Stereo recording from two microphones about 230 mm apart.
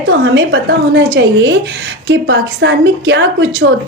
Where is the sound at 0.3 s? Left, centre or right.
Right.